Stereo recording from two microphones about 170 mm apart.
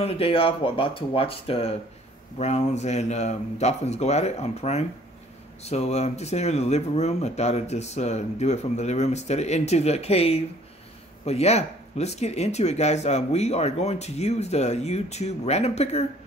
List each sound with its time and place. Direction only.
0.0 s speech: 35° left (ahead or behind)